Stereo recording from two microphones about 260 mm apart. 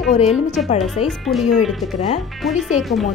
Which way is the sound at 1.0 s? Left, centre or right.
Centre.